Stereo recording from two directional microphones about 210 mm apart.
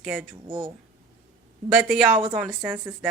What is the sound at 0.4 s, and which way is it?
Speech, 25° right (ahead or behind).